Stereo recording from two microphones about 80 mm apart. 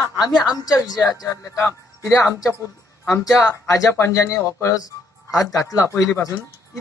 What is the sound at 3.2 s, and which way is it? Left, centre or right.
Speech, left.